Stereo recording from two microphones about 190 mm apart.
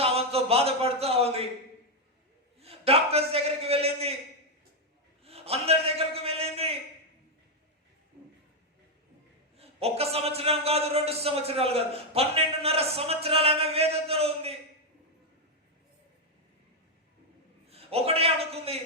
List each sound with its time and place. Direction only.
0.0 s speech: 30° right (ahead or behind)
2.6 s a man's voice: 30° right (ahead or behind)
5.2 s a man's voice: 30° right (ahead or behind)
9.6 s a man's voice: 30° right (ahead or behind)
17.7 s a man's voice: 30° right (ahead or behind)